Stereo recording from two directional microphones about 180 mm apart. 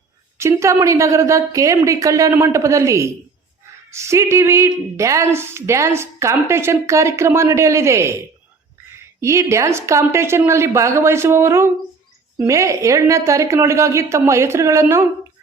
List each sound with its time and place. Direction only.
0.3 s speech: 15° right (ahead or behind)
9.2 s speech: 15° right (ahead or behind)